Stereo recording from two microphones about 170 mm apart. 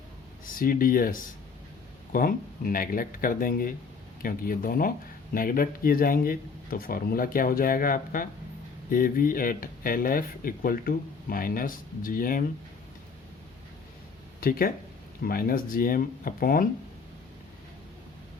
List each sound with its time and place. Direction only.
0.4 s speech: 55° left (ahead or behind)
15.2 s speech: 60° left (ahead or behind)